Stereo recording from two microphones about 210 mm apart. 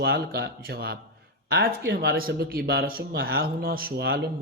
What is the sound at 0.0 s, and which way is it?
Speech, 45° right (ahead or behind).